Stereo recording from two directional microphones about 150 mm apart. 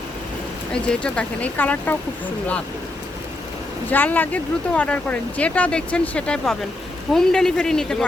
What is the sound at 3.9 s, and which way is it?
Speech, 10° left (ahead or behind).